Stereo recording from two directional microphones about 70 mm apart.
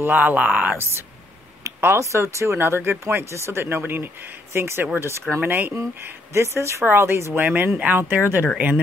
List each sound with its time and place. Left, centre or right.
0.0 s speech: right
1.6 s speech: right